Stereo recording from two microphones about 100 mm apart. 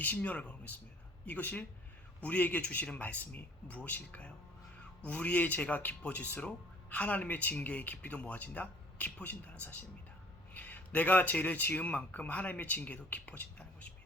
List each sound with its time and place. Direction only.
0.0 s a man's voice: 15° left (ahead or behind)